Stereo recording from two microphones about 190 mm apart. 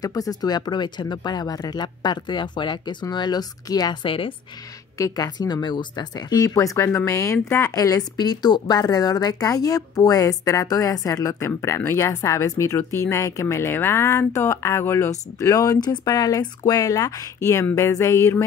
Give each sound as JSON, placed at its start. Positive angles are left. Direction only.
{"t": 0.0, "sound": "speech", "side_deg": 20}